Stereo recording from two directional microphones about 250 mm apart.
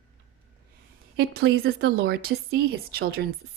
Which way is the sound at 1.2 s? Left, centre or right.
Right.